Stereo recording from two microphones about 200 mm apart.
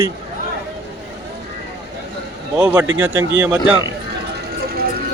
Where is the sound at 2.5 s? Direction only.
15° right (ahead or behind).